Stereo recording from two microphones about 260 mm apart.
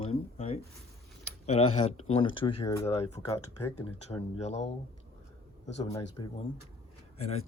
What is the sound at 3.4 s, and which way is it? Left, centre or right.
Speech, left.